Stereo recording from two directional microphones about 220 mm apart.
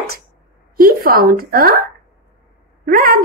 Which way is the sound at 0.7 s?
40° right (ahead or behind).